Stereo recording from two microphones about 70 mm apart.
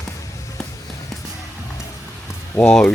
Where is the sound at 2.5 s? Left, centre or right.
Centre.